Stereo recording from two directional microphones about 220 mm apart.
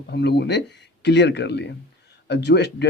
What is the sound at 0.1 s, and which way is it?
Speech, 50° left (ahead or behind).